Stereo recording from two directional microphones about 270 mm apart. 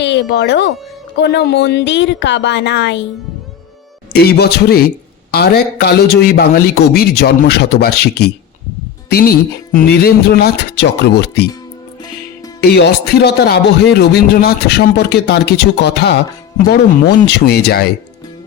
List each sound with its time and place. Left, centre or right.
0.0 s speech: left
4.1 s speech: left
12.5 s speech: left